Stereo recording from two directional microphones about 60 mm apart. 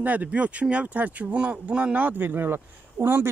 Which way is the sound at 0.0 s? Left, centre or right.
Right.